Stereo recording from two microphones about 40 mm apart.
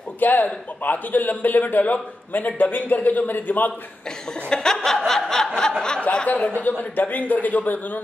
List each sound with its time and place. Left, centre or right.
0.2 s a man's voice: left
4.3 s chuckle: centre
6.2 s a man's voice: left